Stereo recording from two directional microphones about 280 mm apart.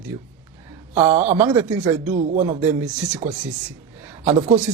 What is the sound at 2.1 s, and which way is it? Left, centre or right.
Speech, right.